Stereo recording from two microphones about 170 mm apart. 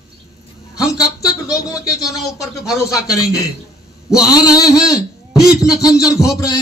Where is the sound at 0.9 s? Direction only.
20° left (ahead or behind).